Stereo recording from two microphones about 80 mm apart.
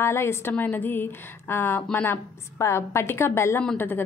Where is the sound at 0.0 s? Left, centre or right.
Left.